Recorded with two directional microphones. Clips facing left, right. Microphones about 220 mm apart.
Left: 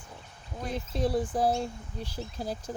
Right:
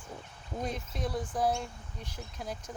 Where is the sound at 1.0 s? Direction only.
30° left (ahead or behind).